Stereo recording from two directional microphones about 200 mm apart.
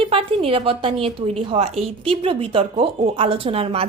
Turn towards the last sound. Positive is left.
turn(degrees=-30)  # may be behind; listen again after turning